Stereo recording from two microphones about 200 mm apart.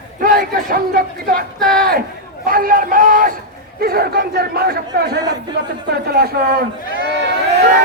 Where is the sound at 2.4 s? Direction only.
45° right (ahead or behind).